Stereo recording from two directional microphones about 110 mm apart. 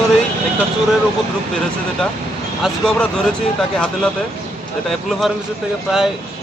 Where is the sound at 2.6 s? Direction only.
5° right (ahead or behind).